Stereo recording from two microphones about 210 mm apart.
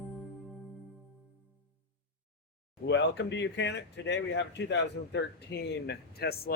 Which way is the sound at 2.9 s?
55° left (ahead or behind).